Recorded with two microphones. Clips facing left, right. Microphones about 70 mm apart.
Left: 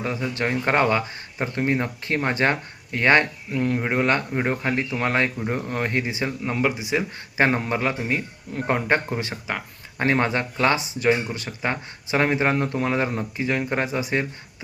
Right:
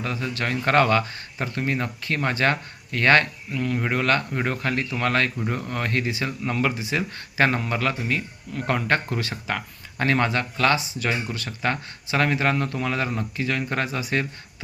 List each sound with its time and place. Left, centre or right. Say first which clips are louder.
0.0 s speech: left 2 dB; left
1.5 s speech: left 3 dB; left
3.5 s speech: left 2 dB; left